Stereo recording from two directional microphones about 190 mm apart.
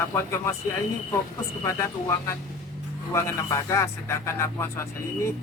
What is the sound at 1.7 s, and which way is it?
A man's voice, 15° left (ahead or behind).